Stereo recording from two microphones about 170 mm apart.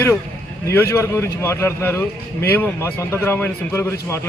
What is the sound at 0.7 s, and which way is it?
Speech, 15° left (ahead or behind).